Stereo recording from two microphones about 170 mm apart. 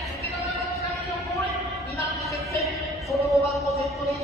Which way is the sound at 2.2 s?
Centre (ahead or behind).